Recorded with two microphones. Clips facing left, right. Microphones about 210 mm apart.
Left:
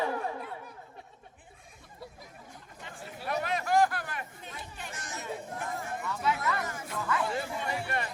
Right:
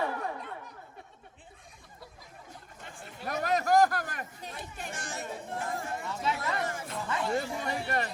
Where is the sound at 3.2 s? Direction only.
40° right (ahead or behind).